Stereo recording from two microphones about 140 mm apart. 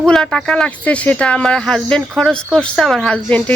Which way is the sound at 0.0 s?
5° left (ahead or behind).